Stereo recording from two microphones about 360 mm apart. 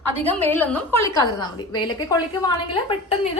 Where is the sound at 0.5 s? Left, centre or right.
Centre.